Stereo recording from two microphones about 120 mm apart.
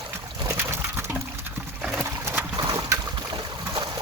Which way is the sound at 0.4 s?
20° right (ahead or behind).